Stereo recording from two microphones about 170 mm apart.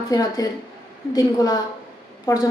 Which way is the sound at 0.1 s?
20° left (ahead or behind).